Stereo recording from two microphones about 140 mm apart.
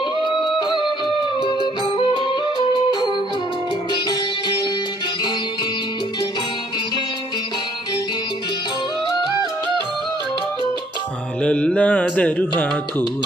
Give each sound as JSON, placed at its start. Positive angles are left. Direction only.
{"t": 0.6, "sound": "music", "side_deg": 35}
{"t": 9.0, "sound": "music", "side_deg": 25}
{"t": 11.4, "sound": "music", "side_deg": 10}